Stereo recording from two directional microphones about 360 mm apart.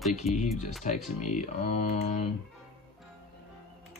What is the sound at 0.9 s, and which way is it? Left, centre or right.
Speech, left.